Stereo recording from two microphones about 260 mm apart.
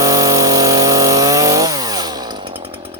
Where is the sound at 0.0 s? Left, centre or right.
Centre.